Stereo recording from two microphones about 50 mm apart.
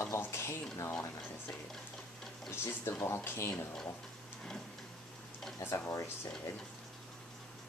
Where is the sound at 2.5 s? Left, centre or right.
Left.